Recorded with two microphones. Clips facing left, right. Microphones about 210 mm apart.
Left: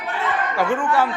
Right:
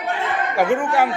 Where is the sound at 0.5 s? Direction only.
15° right (ahead or behind).